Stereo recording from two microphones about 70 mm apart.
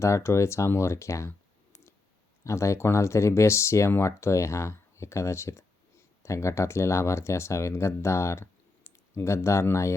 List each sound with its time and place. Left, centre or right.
0.0 s speech: left
2.4 s speech: left